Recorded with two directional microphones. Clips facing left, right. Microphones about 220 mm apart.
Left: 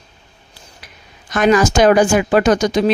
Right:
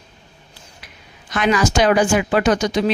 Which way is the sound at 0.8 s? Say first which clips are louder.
Left 1 dB; 45° left (ahead or behind).